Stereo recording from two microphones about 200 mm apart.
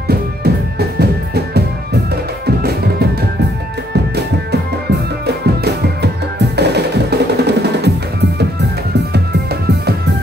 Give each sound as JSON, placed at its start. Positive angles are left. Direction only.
{"t": 0.1, "sound": "music", "side_deg": -50}
{"t": 5.2, "sound": "music", "side_deg": -55}